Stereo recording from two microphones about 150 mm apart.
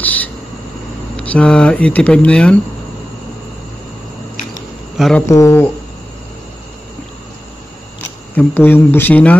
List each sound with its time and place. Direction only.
0.0 s a sound: 10° left (ahead or behind)
1.2 s speech: 10° left (ahead or behind)
4.9 s speech: centre (ahead or behind)
5.3 s speech: 20° left (ahead or behind)
8.4 s speech: 15° left (ahead or behind)